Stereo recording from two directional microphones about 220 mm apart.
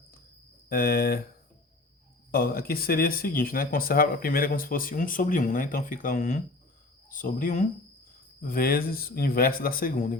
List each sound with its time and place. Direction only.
0.7 s speech: 45° left (ahead or behind)
2.3 s speech: 40° left (ahead or behind)